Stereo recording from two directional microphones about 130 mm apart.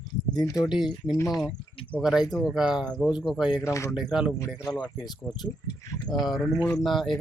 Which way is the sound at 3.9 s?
5° right (ahead or behind).